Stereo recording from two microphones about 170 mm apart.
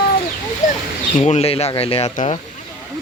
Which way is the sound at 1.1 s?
45° left (ahead or behind).